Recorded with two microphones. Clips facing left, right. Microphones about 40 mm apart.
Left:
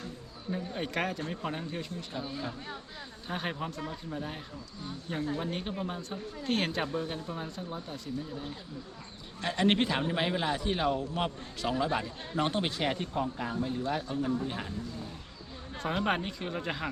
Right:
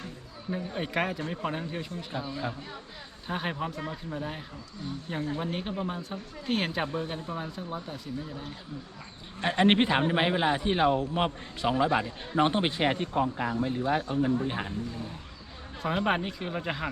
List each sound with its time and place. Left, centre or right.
0.5 s speech: centre
3.2 s speech: centre
9.4 s a man's voice: right
15.8 s speech: centre